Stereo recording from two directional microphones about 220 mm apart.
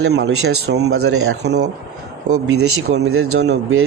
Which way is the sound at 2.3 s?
80° right.